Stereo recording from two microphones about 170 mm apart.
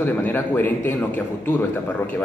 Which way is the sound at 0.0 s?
10° left (ahead or behind).